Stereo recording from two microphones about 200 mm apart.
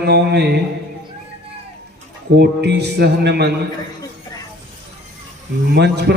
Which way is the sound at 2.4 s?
55° right (ahead or behind).